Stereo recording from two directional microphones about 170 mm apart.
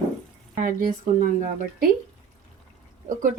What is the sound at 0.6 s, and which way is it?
Speech, 55° right (ahead or behind).